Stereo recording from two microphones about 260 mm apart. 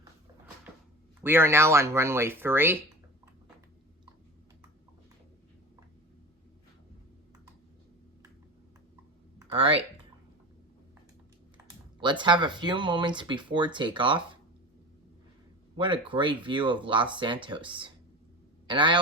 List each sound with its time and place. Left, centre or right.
1.2 s speech: centre
9.4 s speech: right
11.5 s speech: centre
15.8 s speech: centre